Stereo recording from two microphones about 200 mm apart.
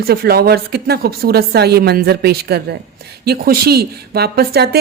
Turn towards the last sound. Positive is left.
turn(degrees=-50)  # may be behind; listen again after turning